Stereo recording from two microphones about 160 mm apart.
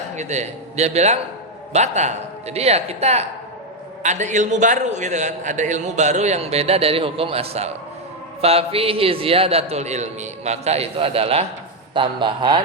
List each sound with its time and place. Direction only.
0.2 s a man's voice: 45° right (ahead or behind); by 12.6 s 30° right (ahead or behind)